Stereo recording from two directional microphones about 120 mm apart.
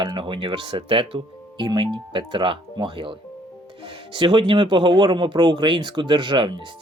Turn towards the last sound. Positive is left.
turn(degrees=-40)  # may be behind; listen again after turning